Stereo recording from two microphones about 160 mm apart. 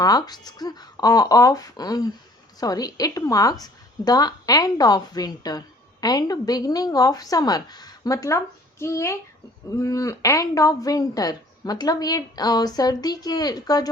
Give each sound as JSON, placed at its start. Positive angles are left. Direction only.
{"t": 0.0, "sound": "a woman's voice", "side_deg": 25}